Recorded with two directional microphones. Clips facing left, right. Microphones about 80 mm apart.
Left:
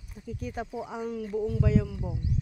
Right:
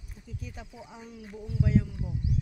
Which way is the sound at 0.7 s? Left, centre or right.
Left.